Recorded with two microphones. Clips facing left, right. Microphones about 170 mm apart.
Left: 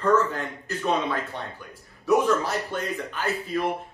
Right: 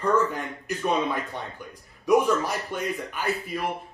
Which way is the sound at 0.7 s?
15° right (ahead or behind).